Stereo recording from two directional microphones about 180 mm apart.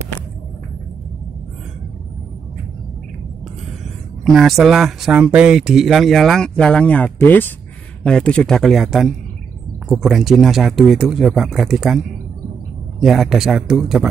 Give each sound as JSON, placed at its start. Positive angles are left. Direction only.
{"t": 4.2, "sound": "speech", "side_deg": 0}
{"t": 13.0, "sound": "speech", "side_deg": 0}